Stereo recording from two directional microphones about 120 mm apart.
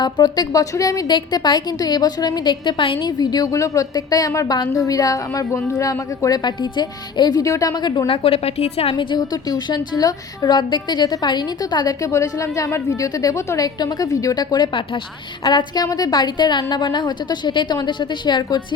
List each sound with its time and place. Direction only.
0.0 s a woman's voice: 35° left (ahead or behind)
3.1 s a woman's voice: 35° left (ahead or behind)